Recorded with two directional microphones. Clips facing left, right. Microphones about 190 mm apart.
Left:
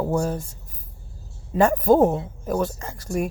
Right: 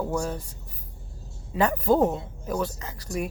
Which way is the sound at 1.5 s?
45° left (ahead or behind).